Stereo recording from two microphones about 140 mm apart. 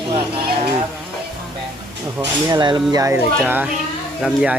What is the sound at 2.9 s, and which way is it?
Speech, 20° right (ahead or behind).